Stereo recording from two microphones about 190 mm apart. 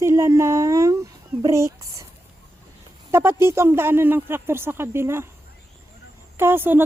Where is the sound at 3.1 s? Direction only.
15° right (ahead or behind).